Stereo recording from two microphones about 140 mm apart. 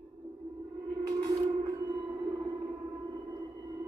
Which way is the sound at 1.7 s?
30° right (ahead or behind).